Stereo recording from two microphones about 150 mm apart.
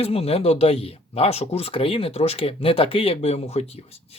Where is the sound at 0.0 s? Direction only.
40° left (ahead or behind).